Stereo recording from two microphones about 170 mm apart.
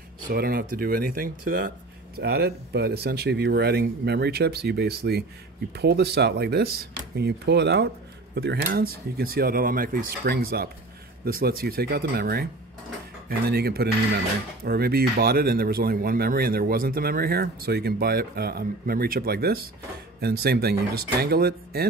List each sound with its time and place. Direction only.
0.3 s speech: 60° right (ahead or behind)
2.1 s speech: 70° right (ahead or behind)
8.6 s speech: 65° right (ahead or behind)